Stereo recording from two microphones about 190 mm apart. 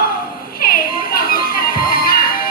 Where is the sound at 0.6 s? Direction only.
50° left (ahead or behind).